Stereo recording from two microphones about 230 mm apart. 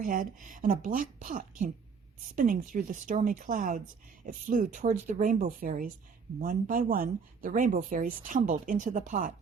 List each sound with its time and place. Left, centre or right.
0.0 s speech: right